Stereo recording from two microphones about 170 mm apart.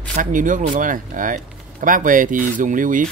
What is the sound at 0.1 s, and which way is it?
Speech, 50° right (ahead or behind).